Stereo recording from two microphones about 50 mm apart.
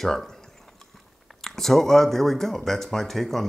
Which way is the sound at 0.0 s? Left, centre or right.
Centre.